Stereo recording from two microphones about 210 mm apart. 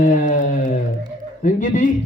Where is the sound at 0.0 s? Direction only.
35° left (ahead or behind).